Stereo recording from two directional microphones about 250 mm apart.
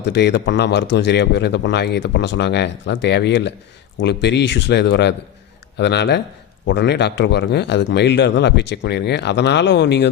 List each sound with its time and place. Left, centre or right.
0.0 s a man's voice: left